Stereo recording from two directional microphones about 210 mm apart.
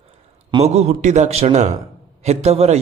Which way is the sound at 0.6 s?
30° right (ahead or behind).